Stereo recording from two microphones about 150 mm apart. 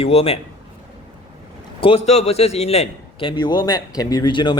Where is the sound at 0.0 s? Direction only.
40° left (ahead or behind).